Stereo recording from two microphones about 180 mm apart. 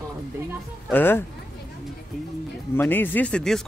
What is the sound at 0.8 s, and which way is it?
Speech, 10° left (ahead or behind).